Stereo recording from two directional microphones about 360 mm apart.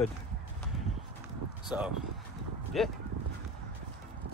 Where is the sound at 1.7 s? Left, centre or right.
Centre.